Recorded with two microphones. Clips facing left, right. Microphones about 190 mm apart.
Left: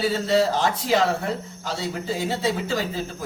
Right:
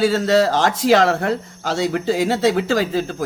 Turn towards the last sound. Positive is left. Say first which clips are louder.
# right 7 dB
turn(degrees=-80)